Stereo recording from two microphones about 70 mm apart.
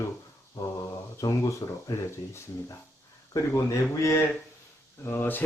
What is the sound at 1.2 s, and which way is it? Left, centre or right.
Mantra, left.